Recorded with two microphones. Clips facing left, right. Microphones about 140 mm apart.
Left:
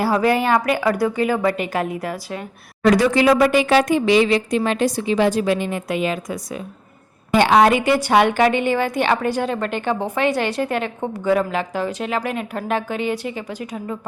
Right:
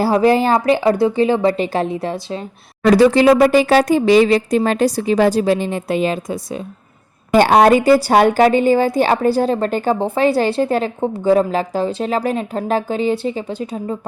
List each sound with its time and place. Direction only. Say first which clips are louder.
0.0 s a woman's voice: right 4 dB; 30° right (ahead or behind)
7.3 s a woman's voice: right 4 dB; 45° right (ahead or behind); by 14.1 s 30° right (ahead or behind)